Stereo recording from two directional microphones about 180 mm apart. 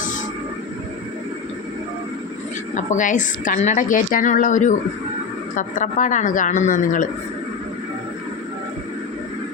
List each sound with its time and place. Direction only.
2.7 s a woman's voice: 45° left (ahead or behind)